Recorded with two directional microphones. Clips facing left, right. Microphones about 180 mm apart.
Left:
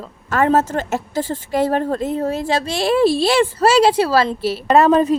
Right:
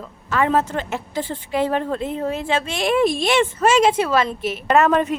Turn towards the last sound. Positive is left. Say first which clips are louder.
# left 4 dB
turn(degrees=30)  # may be behind; listen again after turning